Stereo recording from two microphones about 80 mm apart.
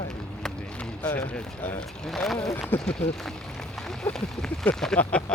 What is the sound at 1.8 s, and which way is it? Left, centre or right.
Speech, centre.